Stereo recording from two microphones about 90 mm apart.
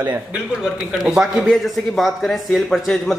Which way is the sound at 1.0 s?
5° right (ahead or behind).